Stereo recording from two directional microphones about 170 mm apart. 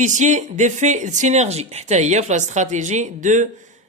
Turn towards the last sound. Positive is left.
turn(degrees=-45)  # may be behind; listen again after turning